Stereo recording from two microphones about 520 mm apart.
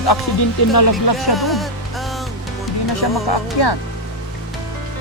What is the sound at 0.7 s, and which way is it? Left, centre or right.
Speech, left.